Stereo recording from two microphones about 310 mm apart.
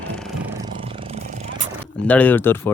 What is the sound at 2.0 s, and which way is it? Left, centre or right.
Speech, centre.